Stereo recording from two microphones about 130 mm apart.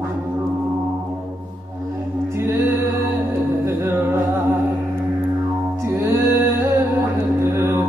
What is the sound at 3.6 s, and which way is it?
Music, 15° right (ahead or behind).